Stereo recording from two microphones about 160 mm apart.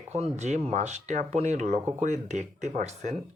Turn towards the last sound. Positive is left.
turn(degrees=-45)  # may be behind; listen again after turning